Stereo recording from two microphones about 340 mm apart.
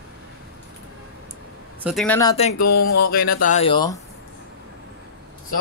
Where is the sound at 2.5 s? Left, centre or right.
Left.